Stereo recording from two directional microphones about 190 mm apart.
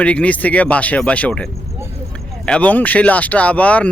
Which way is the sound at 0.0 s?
5° left (ahead or behind).